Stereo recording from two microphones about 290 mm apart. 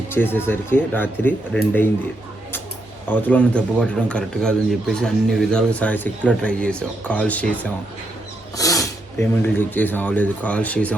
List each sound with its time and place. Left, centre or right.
0.1 s speech: centre
3.1 s speech: centre